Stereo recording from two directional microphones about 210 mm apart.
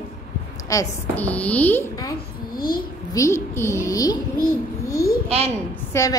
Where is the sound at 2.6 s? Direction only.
45° left (ahead or behind).